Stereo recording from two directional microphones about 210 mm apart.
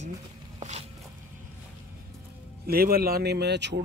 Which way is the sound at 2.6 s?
45° right (ahead or behind).